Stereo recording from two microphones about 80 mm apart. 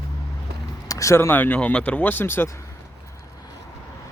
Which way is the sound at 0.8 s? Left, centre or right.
Left.